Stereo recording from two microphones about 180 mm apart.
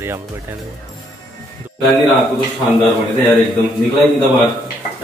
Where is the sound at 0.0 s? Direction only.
15° right (ahead or behind).